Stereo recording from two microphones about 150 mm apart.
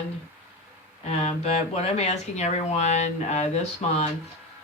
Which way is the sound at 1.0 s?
45° left (ahead or behind).